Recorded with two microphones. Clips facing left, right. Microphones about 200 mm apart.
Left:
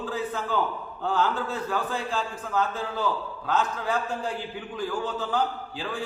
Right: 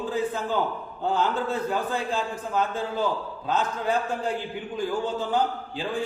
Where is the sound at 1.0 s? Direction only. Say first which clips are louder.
Right 1 dB; 20° right (ahead or behind).